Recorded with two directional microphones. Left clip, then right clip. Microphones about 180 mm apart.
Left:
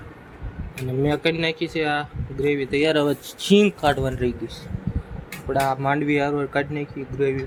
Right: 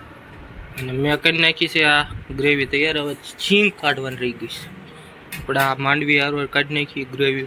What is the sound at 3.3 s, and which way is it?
Speech, 20° left (ahead or behind).